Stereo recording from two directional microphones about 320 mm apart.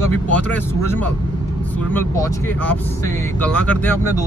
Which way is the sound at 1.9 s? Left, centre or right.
Centre.